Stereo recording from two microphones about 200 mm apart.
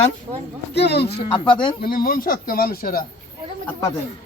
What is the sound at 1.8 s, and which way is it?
Speech, 45° left (ahead or behind).